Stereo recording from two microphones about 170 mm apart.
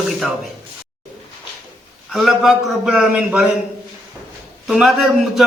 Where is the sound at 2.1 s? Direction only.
Centre (ahead or behind).